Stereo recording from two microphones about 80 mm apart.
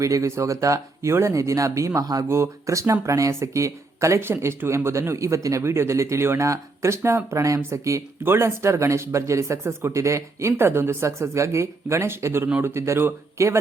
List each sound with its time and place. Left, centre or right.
0.0 s speech: right